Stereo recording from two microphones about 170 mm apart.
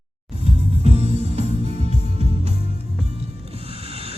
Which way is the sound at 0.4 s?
35° right (ahead or behind).